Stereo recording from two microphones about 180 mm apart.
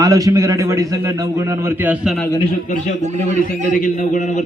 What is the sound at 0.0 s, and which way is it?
A man's voice, 20° right (ahead or behind).